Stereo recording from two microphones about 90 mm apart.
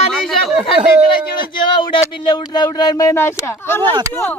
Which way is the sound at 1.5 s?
65° left (ahead or behind).